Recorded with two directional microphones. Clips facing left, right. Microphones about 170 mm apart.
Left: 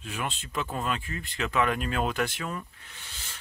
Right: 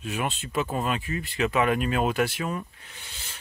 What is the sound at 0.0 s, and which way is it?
Speech, 15° right (ahead or behind).